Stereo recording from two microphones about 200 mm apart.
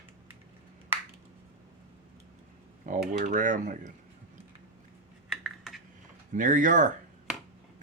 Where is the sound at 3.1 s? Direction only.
40° right (ahead or behind).